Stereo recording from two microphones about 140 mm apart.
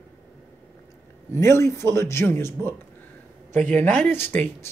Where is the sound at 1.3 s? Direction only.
20° left (ahead or behind).